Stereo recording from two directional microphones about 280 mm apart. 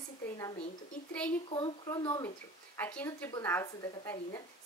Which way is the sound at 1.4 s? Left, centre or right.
Centre.